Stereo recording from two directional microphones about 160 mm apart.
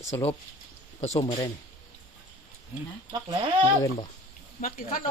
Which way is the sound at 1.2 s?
25° left (ahead or behind).